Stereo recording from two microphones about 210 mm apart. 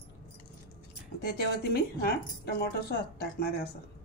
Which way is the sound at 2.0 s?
50° left (ahead or behind).